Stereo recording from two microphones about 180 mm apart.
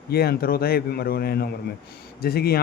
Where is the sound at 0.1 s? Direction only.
60° left (ahead or behind).